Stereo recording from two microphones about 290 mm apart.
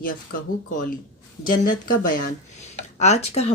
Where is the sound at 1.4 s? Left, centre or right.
Left.